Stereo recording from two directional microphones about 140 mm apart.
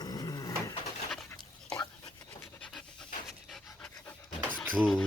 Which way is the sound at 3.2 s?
Centre (ahead or behind).